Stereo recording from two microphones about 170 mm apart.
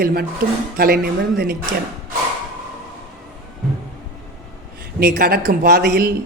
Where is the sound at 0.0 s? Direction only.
65° right (ahead or behind).